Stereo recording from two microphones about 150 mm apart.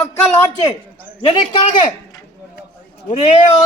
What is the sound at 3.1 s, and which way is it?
Speech, 45° left (ahead or behind).